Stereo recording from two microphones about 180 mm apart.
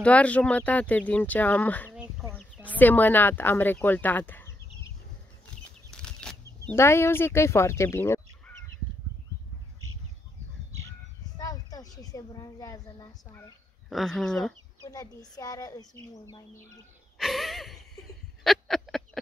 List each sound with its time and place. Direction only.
0.0 s speech: 5° left (ahead or behind)
2.0 s a sound: 10° right (ahead or behind)
2.3 s speech: 5° left (ahead or behind)
5.9 s bird flight: 5° left (ahead or behind)
6.7 s speech: 15° left (ahead or behind)
11.3 s a sound: 20° left (ahead or behind)
12.0 s speech: 20° left (ahead or behind)
13.8 s speech: centre (ahead or behind)
14.9 s speech: 20° left (ahead or behind)
17.2 s speech: centre (ahead or behind)
18.4 s a sound: centre (ahead or behind)